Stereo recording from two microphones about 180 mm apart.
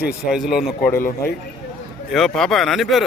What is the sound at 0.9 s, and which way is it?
Speech, 55° left (ahead or behind).